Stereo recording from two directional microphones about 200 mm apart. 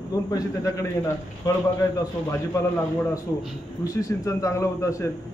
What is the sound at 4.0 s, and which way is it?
Speech, 15° left (ahead or behind).